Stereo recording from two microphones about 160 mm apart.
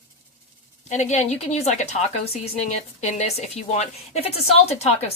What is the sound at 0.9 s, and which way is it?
A woman's voice, 45° left (ahead or behind).